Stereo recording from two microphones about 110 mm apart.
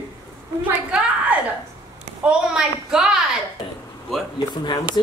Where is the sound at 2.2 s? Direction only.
5° right (ahead or behind).